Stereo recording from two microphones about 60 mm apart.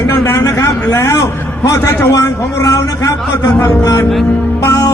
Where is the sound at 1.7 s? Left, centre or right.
Left.